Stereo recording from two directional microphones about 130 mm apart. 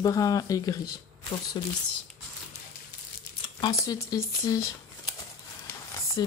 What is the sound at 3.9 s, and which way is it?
Speech, 25° left (ahead or behind).